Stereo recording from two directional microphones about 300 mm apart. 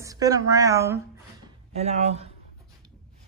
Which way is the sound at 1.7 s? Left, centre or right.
Right.